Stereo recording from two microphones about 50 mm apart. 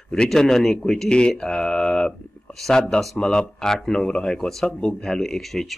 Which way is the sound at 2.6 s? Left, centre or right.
Centre.